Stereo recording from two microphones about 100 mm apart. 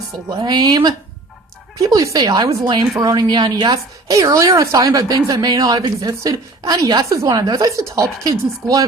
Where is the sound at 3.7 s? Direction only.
35° right (ahead or behind).